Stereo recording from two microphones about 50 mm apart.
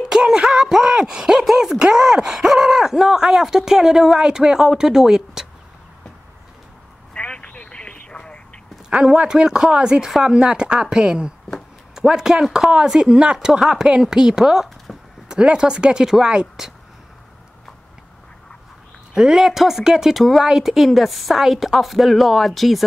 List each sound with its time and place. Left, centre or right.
0.1 s a sound: centre
1.8 s groan: centre
4.2 s speech: centre
7.2 s vehicle: left
9.0 s speech: centre
14.9 s a sound: centre
15.2 s speech: centre
19.1 s speech: centre